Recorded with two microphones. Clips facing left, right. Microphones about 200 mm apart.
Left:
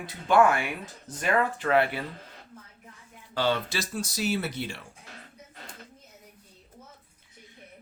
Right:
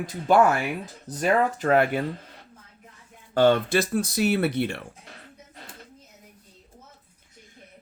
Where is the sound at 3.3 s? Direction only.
50° right (ahead or behind).